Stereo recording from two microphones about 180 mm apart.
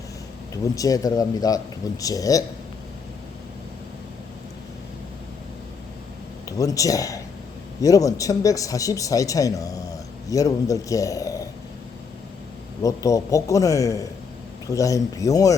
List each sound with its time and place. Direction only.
0.5 s speech: 20° left (ahead or behind)
6.6 s speech: 20° left (ahead or behind)
12.8 s speech: 20° left (ahead or behind)